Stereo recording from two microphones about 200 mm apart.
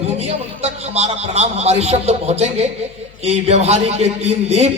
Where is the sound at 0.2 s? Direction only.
30° right (ahead or behind).